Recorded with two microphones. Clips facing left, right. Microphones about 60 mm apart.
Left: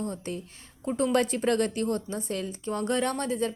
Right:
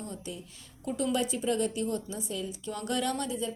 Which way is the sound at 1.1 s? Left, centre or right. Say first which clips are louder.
Left 5 dB; left.